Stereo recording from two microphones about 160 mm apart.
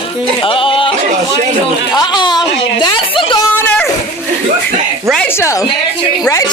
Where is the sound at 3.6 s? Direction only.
5° left (ahead or behind).